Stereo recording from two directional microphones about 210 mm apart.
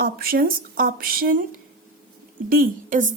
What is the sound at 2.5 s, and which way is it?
Speech, 40° right (ahead or behind).